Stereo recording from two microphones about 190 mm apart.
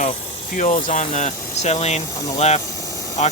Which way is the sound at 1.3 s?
15° left (ahead or behind).